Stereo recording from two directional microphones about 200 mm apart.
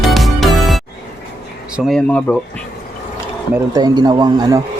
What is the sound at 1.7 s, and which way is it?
Speech, centre (ahead or behind).